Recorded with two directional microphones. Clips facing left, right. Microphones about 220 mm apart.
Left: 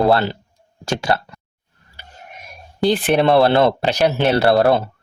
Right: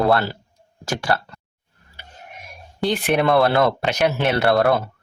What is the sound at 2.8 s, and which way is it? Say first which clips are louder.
Speech: left 4 dB; 35° left (ahead or behind).